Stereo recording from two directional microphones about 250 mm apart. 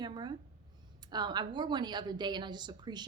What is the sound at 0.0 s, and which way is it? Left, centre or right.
A woman's voice, centre.